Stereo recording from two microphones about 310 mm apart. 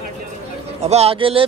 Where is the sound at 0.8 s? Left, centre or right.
Centre.